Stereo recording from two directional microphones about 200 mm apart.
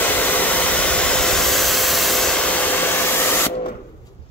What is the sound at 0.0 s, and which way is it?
Hair dryer, 10° left (ahead or behind).